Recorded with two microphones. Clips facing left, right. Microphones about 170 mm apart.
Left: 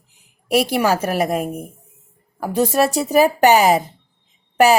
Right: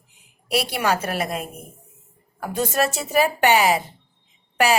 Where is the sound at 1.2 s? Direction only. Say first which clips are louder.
Left 8 dB; 50° left (ahead or behind).